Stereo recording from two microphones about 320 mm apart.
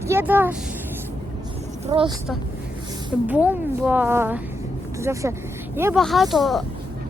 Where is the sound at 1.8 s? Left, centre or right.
Centre.